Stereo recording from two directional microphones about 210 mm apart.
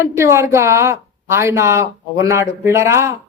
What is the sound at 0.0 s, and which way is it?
A woman's voice, 15° right (ahead or behind).